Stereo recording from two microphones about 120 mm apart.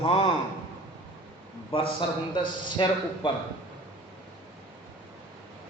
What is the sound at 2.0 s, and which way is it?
Speech, 40° left (ahead or behind).